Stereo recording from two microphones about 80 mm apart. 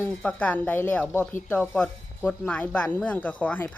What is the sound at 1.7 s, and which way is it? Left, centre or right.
A woman's voice, centre.